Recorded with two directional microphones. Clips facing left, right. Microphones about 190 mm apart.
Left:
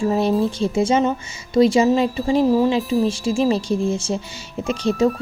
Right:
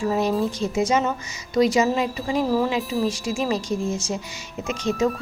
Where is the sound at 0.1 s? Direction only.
30° left (ahead or behind).